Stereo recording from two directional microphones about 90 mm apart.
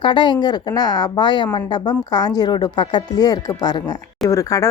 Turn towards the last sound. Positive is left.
turn(degrees=40)  # may be behind; listen again after turning